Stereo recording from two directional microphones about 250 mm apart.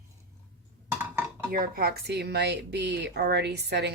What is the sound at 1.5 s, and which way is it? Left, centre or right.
Speech, right.